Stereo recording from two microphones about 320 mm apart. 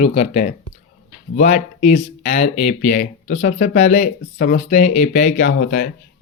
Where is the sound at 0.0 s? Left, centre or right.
Centre.